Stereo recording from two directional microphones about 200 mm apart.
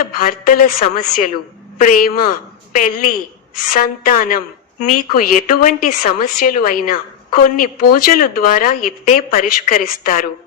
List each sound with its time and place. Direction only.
0.0 s a woman's voice: 45° left (ahead or behind)
1.8 s a woman's voice: 45° left (ahead or behind)